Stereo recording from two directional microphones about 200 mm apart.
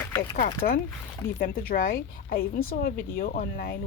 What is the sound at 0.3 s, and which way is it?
Speech, 45° left (ahead or behind).